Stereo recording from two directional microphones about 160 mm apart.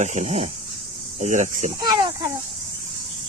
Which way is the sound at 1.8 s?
25° right (ahead or behind).